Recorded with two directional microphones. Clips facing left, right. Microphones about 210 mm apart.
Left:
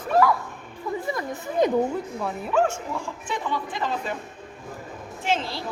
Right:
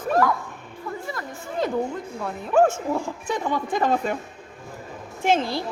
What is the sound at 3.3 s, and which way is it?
Speech, 45° right (ahead or behind).